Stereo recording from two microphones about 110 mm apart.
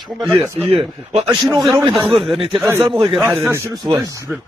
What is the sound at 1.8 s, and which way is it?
Speech, 50° right (ahead or behind).